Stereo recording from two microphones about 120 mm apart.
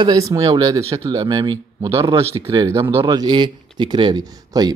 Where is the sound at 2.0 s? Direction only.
25° right (ahead or behind).